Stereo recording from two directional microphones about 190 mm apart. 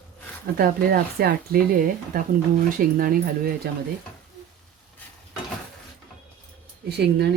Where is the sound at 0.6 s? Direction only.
50° right (ahead or behind).